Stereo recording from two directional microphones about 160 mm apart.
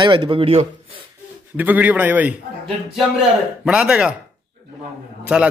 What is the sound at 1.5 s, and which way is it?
Speech, 10° right (ahead or behind).